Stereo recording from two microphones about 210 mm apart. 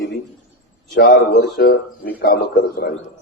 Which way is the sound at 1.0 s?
55° left (ahead or behind).